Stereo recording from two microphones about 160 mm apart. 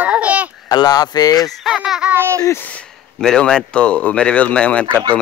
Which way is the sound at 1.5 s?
5° right (ahead or behind).